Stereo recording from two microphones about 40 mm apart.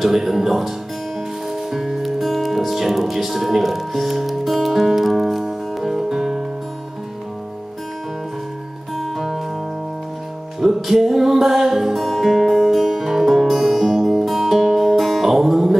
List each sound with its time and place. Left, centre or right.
0.0 s speech: centre
4.6 s music: centre
8.9 s music: centre
10.6 s music: centre